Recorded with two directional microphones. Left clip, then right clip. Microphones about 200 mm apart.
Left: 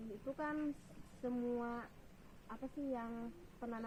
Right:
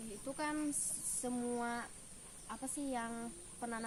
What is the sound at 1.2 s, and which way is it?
A woman's voice, 20° right (ahead or behind).